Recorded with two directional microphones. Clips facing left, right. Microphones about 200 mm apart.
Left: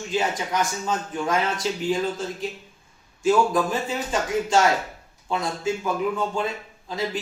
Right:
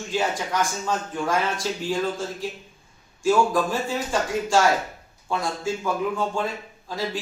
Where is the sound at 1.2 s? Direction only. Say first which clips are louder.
Left 1 dB; 20° left (ahead or behind).